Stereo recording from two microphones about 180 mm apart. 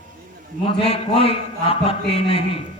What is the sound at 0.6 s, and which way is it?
A man's voice, 30° left (ahead or behind).